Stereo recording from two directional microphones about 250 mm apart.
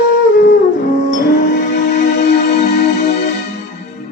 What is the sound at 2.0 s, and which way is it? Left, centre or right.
Music, left.